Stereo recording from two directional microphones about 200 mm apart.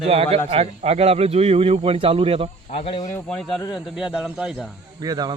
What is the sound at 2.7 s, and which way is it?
Speech, 30° left (ahead or behind).